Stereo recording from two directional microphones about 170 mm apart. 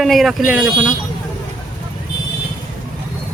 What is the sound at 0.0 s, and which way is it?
Speech, centre (ahead or behind).